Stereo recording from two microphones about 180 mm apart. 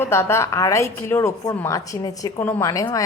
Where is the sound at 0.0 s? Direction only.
15° left (ahead or behind).